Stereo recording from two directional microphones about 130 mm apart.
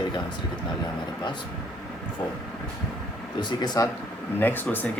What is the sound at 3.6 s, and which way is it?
Speech, 30° left (ahead or behind).